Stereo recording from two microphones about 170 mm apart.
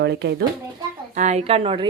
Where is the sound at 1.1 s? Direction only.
45° right (ahead or behind).